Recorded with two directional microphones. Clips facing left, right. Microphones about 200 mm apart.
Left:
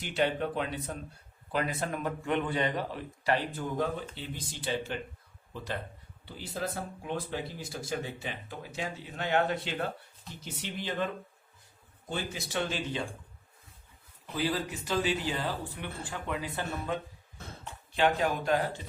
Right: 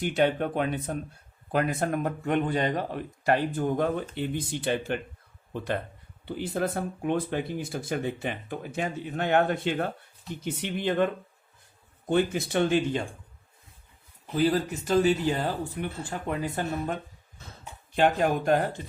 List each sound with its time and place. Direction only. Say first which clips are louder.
0.0 s a man's voice: right 5 dB; 50° right (ahead or behind)
14.3 s a man's voice: right 7 dB; 45° right (ahead or behind)